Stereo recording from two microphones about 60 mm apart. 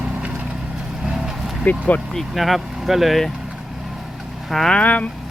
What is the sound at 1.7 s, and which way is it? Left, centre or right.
Speech, left.